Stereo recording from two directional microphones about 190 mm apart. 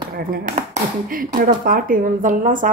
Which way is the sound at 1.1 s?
45° right (ahead or behind).